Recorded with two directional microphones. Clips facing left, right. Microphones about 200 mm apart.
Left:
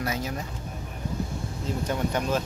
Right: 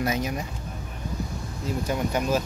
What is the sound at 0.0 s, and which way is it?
Speech, 20° right (ahead or behind).